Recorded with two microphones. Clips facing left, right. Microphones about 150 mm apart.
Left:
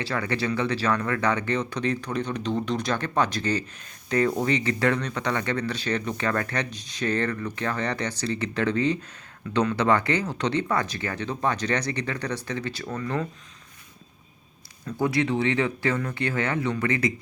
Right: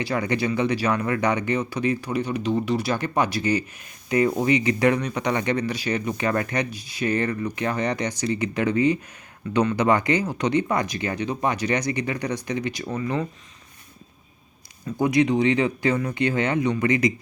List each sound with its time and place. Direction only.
0.0 s speech: 15° right (ahead or behind)
14.8 s speech: 15° right (ahead or behind)